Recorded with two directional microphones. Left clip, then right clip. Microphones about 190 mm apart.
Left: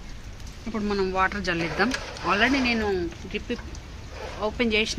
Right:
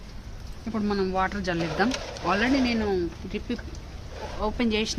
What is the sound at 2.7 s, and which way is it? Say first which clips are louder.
Speech: left 1 dB; 35° right (ahead or behind).